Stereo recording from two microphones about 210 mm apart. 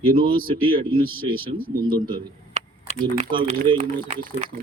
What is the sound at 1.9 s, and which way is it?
A man's voice, 20° right (ahead or behind).